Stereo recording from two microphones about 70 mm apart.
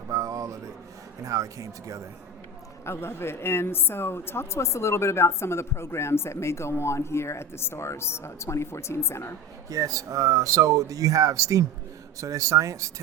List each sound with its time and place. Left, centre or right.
0.1 s a sound: right
1.2 s speech: right
2.8 s a woman's voice: left
9.6 s speech: right